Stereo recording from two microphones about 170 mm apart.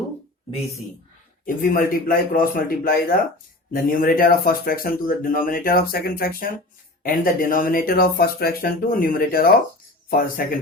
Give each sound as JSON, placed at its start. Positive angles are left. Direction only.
{"t": 1.5, "sound": "speech", "side_deg": 55}